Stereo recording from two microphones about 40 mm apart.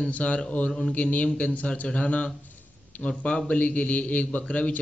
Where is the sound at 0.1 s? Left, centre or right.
Left.